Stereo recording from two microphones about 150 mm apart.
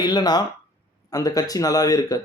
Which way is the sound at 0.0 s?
25° left (ahead or behind).